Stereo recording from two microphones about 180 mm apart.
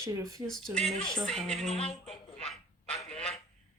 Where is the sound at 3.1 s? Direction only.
5° left (ahead or behind).